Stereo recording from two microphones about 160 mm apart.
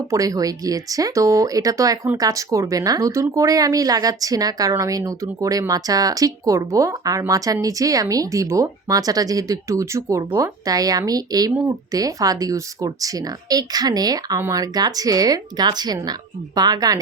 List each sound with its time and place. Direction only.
0.1 s speech: 20° right (ahead or behind)